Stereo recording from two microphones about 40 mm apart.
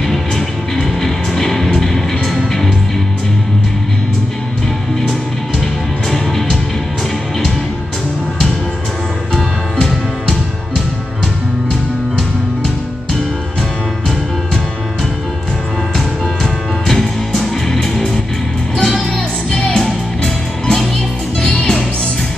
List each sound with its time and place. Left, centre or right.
0.7 s music: centre
6.0 s music: centre
9.3 s music: centre
16.8 s music: centre
19.1 s music: centre